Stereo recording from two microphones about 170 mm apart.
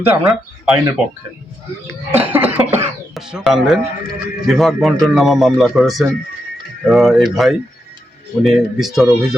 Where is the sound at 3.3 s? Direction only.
Centre (ahead or behind).